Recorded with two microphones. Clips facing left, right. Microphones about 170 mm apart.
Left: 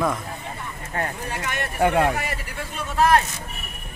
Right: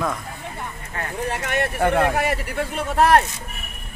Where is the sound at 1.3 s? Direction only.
60° right (ahead or behind).